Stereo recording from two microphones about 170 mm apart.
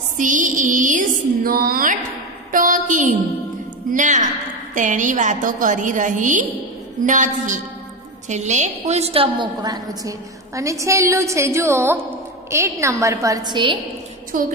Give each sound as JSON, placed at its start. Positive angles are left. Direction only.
{"t": 0.2, "sound": "music", "side_deg": -50}
{"t": 8.3, "sound": "a woman's voice", "side_deg": -45}
{"t": 14.3, "sound": "a woman's voice", "side_deg": -55}